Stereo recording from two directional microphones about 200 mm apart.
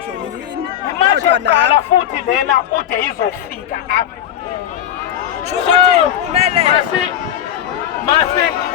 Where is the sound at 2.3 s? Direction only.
40° left (ahead or behind).